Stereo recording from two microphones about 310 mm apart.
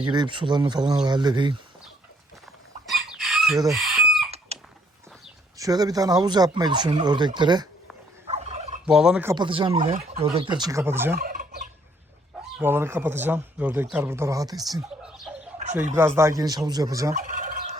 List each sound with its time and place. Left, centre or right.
0.0 s speech: centre
2.8 s chicken: centre
4.5 s a sound: centre
5.5 s speech: centre
8.3 s gobble: right
8.9 s speech: centre
11.2 s gobble: right
12.5 s speech: centre